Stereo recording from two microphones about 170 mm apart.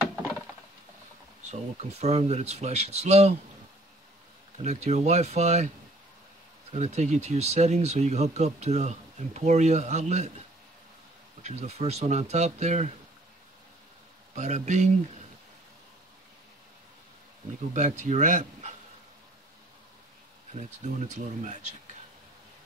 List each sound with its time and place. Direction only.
1.5 s speech: 40° right (ahead or behind)
4.6 s speech: 40° right (ahead or behind)
6.7 s speech: 40° right (ahead or behind)
11.4 s speech: 40° right (ahead or behind)
14.3 s speech: 45° right (ahead or behind)
17.7 s speech: 45° right (ahead or behind)
20.5 s speech: 45° right (ahead or behind)